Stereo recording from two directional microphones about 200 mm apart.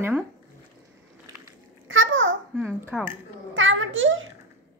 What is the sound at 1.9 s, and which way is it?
Babbling, 75° right (ahead or behind).